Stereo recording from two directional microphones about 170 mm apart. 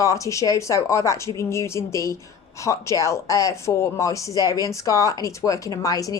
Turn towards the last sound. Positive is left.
turn(degrees=20)  # may be behind; listen again after turning